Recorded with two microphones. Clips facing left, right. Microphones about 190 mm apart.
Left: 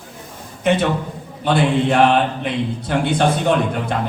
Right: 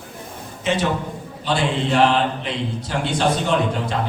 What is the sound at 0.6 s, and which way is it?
A man's voice, 55° left (ahead or behind).